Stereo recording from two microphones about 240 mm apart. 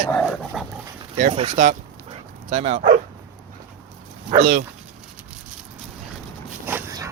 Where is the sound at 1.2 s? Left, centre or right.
Right.